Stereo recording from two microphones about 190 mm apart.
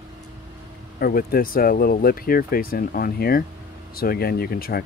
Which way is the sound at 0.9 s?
50° left (ahead or behind).